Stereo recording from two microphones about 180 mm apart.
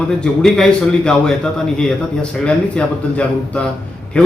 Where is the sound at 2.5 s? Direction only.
5° left (ahead or behind).